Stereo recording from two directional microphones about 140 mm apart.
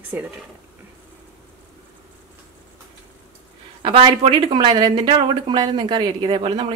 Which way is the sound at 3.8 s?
40° right (ahead or behind).